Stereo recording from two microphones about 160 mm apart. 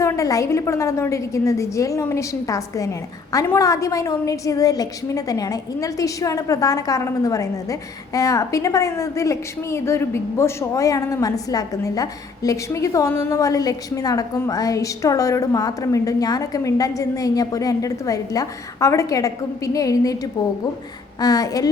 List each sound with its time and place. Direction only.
0.0 s a woman's voice: 20° left (ahead or behind)